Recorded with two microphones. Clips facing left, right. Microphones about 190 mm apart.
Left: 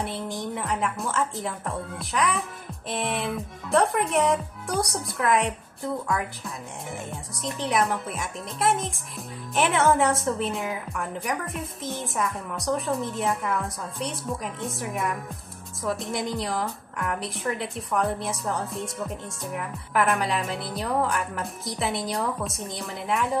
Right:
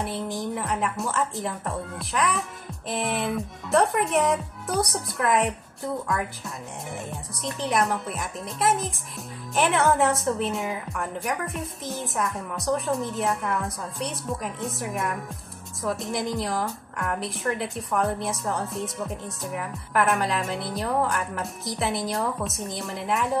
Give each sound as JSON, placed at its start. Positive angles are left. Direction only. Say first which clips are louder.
{"t": 0.0, "sound": "a woman's voice", "louder": "right 1 dB", "side_deg": 0}
{"t": 7.4, "sound": "a woman's voice", "louder": "even", "side_deg": 0}